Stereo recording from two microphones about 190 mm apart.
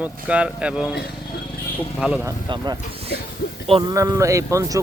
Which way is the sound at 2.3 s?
25° right (ahead or behind).